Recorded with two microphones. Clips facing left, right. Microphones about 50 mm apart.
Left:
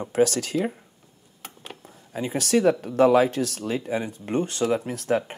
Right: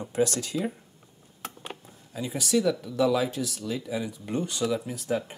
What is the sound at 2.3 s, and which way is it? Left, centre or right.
Speech, left.